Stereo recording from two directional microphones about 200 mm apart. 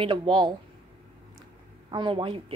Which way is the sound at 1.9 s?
25° right (ahead or behind).